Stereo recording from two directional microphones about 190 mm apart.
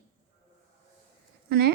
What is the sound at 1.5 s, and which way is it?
Speech, 60° right (ahead or behind).